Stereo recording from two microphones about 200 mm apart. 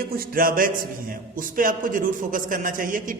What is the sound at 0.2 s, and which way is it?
A man's voice, 45° right (ahead or behind).